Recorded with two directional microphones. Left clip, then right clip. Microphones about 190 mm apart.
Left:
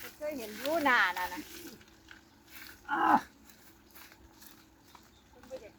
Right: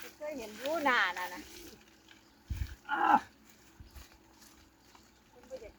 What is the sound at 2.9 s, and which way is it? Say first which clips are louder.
Speech: even; 25° left (ahead or behind).